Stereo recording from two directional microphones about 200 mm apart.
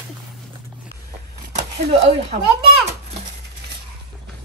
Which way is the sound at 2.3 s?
40° right (ahead or behind).